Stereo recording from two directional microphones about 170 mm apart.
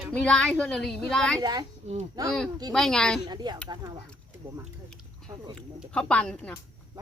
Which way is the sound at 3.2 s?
25° right (ahead or behind).